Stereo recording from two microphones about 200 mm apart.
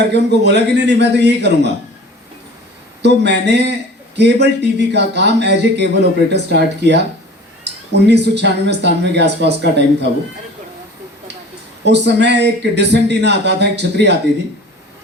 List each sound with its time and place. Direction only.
0.1 s speech: 55° right (ahead or behind)
3.0 s speech: 60° right (ahead or behind)
11.9 s speech: 55° right (ahead or behind)